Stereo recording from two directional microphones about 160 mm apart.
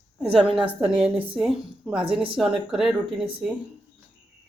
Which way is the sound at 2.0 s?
35° right (ahead or behind).